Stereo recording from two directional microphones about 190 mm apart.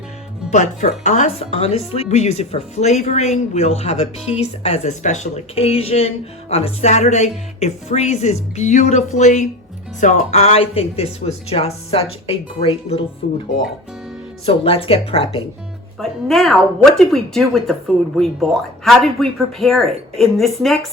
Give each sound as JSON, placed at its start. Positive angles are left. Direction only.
{"t": 0.5, "sound": "speech", "side_deg": 40}
{"t": 14.4, "sound": "speech", "side_deg": 30}
{"t": 16.0, "sound": "speech", "side_deg": 0}